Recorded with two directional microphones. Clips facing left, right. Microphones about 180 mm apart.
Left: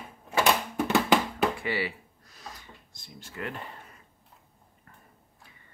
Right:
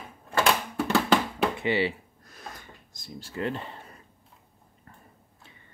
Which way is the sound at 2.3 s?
55° right (ahead or behind).